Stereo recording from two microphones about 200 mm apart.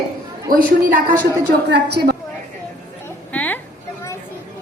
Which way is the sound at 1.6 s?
55° right (ahead or behind).